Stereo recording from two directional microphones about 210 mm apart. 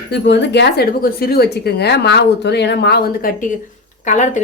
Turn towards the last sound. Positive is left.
turn(degrees=35)  # may be behind; listen again after turning